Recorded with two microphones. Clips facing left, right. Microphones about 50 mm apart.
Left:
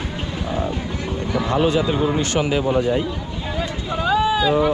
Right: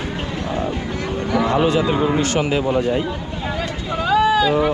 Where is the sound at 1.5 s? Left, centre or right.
Right.